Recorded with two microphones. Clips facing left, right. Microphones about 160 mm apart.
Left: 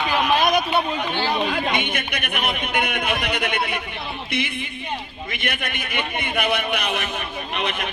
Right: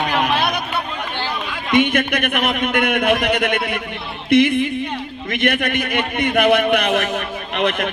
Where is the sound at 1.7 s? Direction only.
60° right (ahead or behind).